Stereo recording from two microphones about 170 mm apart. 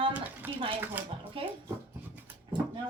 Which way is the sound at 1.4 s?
30° right (ahead or behind).